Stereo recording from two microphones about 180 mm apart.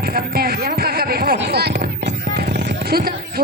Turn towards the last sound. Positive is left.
turn(degrees=-55)  # may be behind; listen again after turning